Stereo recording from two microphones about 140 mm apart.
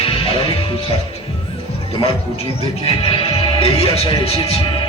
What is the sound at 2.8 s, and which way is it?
Speech, 40° left (ahead or behind).